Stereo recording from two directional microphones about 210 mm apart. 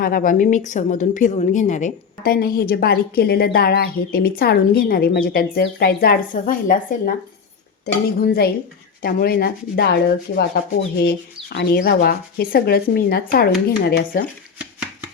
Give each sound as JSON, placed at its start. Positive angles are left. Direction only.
{"t": 0.0, "sound": "a woman's voice", "side_deg": 40}
{"t": 8.2, "sound": "a woman's voice", "side_deg": 45}